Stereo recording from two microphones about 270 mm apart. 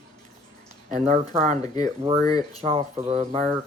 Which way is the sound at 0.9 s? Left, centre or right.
Right.